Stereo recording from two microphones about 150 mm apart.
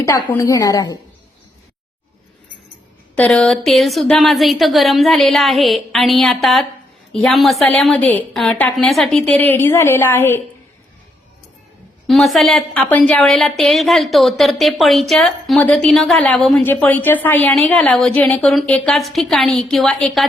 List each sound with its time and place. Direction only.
0.3 s a woman's voice: 20° left (ahead or behind)
3.2 s a woman's voice: 5° left (ahead or behind)
12.0 s a woman's voice: centre (ahead or behind)